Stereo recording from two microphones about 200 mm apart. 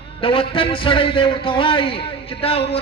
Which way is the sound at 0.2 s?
25° left (ahead or behind).